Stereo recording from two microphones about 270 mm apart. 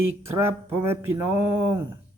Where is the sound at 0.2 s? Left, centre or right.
Centre.